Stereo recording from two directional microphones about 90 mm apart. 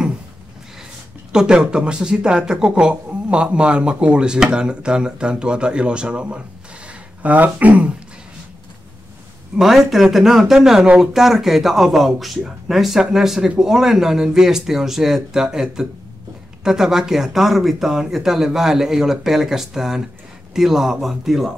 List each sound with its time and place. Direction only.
1.3 s speech: 10° right (ahead or behind)
9.6 s speech: centre (ahead or behind)